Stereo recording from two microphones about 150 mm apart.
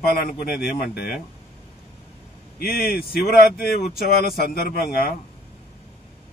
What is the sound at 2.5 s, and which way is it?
Speech, 90° left.